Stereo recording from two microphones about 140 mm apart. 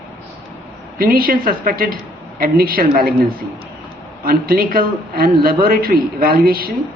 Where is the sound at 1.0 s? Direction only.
90° right.